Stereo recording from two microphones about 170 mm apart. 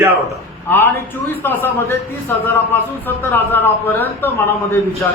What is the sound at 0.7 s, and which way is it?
A man's voice, 10° left (ahead or behind).